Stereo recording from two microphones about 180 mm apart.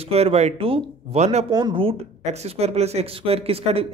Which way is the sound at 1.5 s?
25° right (ahead or behind).